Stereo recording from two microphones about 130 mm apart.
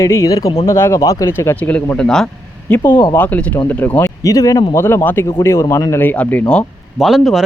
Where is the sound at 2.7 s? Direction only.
15° left (ahead or behind); by 7.4 s 5° right (ahead or behind).